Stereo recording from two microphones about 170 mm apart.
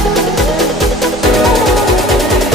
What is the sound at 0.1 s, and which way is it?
Music, centre (ahead or behind).